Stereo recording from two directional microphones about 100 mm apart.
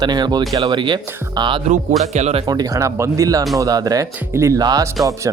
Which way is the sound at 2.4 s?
40° right (ahead or behind).